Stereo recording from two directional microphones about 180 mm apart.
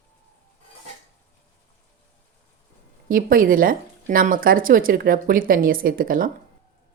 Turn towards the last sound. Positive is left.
turn(degrees=-50)  # may be behind; listen again after turning